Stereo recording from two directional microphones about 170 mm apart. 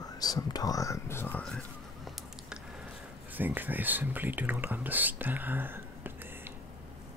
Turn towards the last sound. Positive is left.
turn(degrees=-10)  # may be behind; listen again after turning